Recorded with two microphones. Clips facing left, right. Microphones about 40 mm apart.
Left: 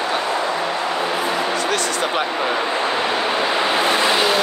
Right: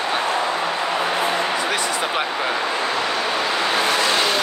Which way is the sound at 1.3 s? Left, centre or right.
Centre.